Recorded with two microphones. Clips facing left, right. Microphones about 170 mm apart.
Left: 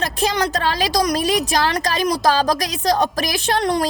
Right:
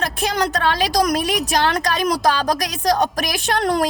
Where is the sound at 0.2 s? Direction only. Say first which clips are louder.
Left 1 dB; 35° left (ahead or behind).